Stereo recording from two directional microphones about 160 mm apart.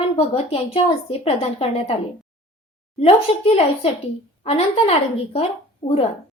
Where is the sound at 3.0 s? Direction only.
35° left (ahead or behind).